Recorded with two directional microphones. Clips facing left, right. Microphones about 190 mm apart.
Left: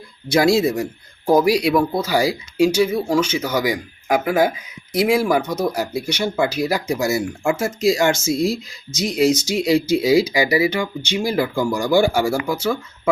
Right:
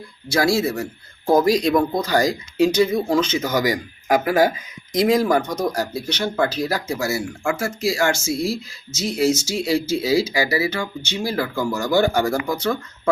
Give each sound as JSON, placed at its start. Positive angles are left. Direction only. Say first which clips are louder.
{"t": 0.3, "sound": "speech", "louder": "left 4 dB", "side_deg": 20}